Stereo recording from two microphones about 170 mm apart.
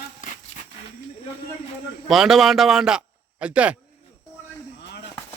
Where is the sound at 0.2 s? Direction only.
50° left (ahead or behind).